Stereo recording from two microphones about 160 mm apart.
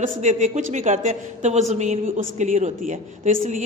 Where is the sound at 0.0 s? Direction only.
50° right (ahead or behind).